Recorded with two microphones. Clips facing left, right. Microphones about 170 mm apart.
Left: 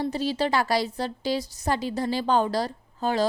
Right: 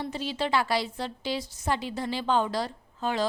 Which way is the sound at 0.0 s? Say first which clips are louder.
Left 5 dB; 40° left (ahead or behind).